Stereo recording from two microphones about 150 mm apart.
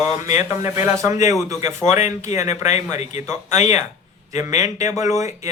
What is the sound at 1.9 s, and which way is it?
Speech, 55° left (ahead or behind).